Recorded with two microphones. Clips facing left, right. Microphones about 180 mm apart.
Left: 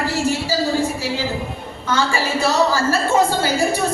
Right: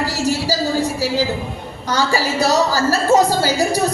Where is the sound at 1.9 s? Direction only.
40° right (ahead or behind).